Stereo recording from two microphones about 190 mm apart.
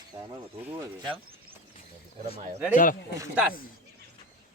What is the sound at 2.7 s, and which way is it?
Speech, 45° left (ahead or behind).